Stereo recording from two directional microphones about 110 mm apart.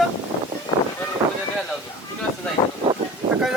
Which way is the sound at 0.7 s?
40° left (ahead or behind).